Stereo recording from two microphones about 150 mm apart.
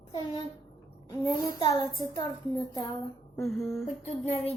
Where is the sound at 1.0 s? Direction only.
25° left (ahead or behind).